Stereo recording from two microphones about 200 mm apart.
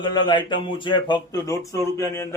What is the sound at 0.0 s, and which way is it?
Speech, 20° left (ahead or behind).